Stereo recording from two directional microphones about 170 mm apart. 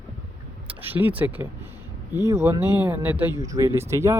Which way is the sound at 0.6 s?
10° right (ahead or behind).